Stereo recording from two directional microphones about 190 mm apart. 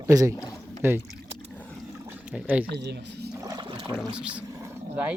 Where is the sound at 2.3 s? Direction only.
5° right (ahead or behind).